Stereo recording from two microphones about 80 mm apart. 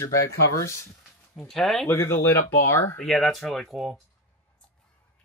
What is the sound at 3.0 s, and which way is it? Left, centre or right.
Speech, centre.